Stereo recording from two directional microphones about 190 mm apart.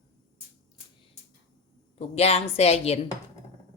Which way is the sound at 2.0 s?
35° left (ahead or behind).